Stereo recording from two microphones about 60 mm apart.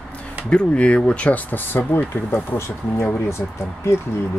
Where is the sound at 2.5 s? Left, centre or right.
Left.